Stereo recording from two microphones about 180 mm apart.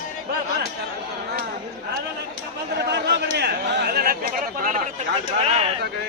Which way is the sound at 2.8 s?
70° right (ahead or behind).